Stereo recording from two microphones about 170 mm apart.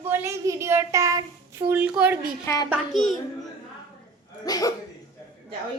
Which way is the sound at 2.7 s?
Centre (ahead or behind).